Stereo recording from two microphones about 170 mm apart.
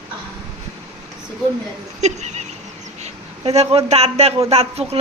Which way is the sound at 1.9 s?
40° right (ahead or behind).